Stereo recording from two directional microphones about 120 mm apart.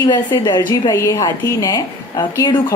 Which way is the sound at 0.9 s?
25° left (ahead or behind).